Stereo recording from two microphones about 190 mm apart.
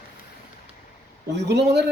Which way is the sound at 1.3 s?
60° right (ahead or behind).